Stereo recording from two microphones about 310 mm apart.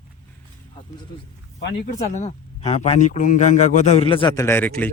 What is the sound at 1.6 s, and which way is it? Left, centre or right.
Speech, left.